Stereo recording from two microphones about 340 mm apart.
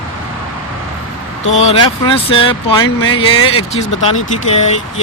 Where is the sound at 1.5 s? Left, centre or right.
Centre.